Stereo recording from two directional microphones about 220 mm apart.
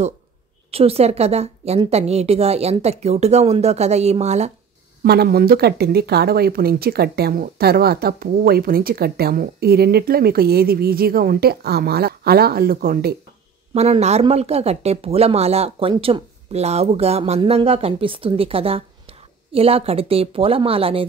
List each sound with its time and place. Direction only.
0.7 s speech: 25° right (ahead or behind)
5.0 s speech: 45° right (ahead or behind)
13.7 s speech: 30° right (ahead or behind)